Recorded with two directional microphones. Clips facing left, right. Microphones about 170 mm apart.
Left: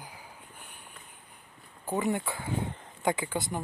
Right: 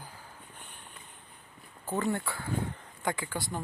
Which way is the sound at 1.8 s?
15° left (ahead or behind).